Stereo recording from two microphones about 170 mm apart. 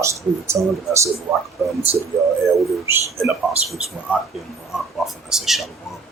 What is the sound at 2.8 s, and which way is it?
Speech, 15° right (ahead or behind).